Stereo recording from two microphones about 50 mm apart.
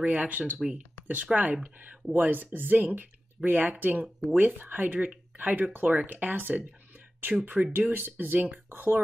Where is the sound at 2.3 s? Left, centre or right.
Right.